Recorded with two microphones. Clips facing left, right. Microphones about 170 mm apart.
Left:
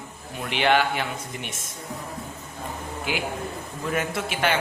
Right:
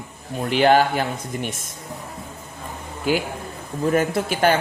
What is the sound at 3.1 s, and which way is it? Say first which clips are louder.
Speech: right 7 dB; 40° right (ahead or behind).